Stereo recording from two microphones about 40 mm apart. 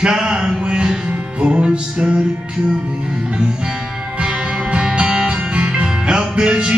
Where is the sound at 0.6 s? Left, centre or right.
Right.